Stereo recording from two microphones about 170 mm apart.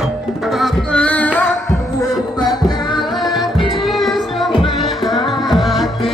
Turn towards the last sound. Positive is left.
turn(degrees=0)  # may be behind; listen again after turning